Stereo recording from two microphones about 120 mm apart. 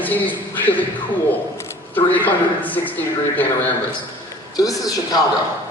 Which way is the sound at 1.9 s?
15° left (ahead or behind).